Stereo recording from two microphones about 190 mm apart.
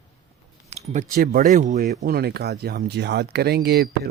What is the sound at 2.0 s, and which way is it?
Speech, 55° right (ahead or behind).